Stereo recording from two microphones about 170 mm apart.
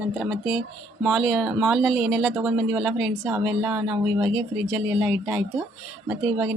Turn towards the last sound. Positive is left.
turn(degrees=-5)  # may be behind; listen again after turning